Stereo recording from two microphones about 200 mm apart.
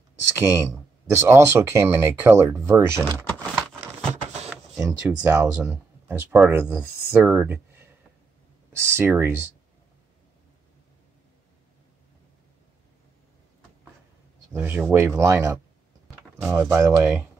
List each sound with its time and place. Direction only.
0.4 s speech: 15° right (ahead or behind)
4.1 s a sound: 35° right (ahead or behind)
4.5 s speech: 10° right (ahead or behind)
8.7 s speech: 10° right (ahead or behind)
14.5 s speech: 10° right (ahead or behind)